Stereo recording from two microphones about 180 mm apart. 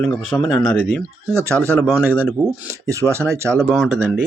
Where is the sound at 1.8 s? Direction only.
5° left (ahead or behind).